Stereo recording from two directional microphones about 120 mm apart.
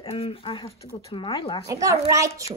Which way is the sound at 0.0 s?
50° left (ahead or behind).